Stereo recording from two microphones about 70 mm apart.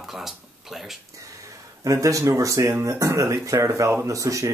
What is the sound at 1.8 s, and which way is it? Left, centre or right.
Speech, right.